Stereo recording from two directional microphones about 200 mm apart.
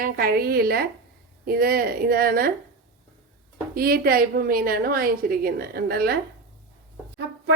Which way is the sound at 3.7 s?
50° right (ahead or behind).